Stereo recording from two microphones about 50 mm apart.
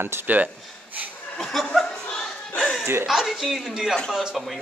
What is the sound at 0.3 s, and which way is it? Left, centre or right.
Speech, right.